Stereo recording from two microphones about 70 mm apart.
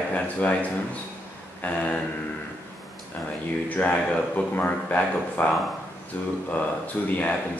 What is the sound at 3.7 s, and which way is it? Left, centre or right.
Speech, centre.